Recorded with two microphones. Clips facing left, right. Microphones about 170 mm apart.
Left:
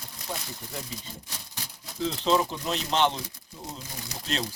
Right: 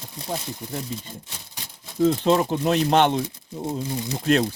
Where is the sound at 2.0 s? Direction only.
55° right (ahead or behind).